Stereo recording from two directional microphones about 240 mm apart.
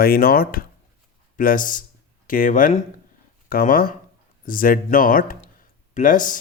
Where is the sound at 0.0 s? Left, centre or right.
Left.